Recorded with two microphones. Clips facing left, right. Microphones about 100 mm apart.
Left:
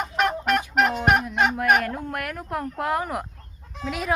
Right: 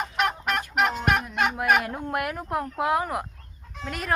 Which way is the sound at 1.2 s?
10° right (ahead or behind).